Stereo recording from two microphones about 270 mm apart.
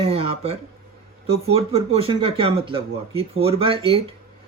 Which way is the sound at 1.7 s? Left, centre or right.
Right.